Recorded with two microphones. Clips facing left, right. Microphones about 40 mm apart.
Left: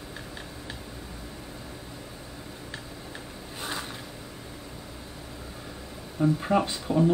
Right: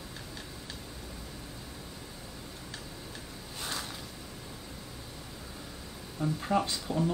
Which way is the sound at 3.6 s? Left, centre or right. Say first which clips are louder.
Left 4 dB; centre.